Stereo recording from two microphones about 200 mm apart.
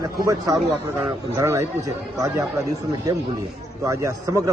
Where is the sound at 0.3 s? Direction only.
15° right (ahead or behind).